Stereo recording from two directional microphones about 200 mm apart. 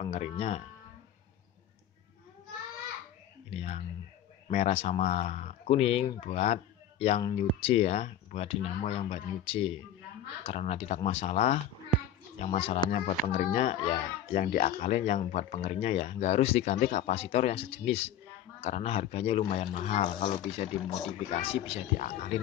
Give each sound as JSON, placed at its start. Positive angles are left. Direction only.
{"t": 0.0, "sound": "speech", "side_deg": 30}
{"t": 3.4, "sound": "speech", "side_deg": 30}